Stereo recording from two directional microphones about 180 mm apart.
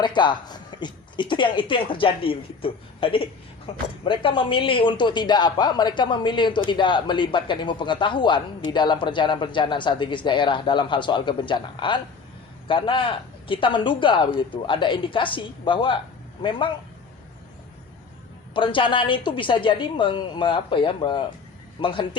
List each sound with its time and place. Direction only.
0.0 s speech: 25° left (ahead or behind)
18.5 s speech: 30° left (ahead or behind)